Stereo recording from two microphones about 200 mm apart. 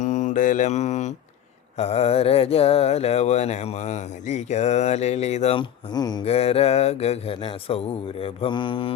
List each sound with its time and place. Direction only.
0.0 s mantra: 35° left (ahead or behind)
1.8 s speech: 30° left (ahead or behind)
8.2 s mantra: 25° left (ahead or behind)